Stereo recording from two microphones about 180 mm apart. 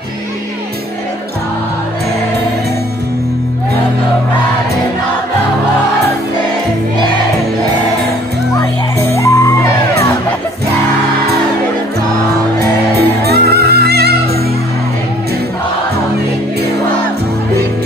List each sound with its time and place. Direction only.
9.1 s music: 15° left (ahead or behind)
12.5 s music: 65° right (ahead or behind)